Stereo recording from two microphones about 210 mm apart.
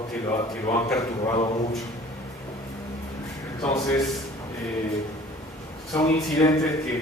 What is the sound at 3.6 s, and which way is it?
Speech, 15° left (ahead or behind).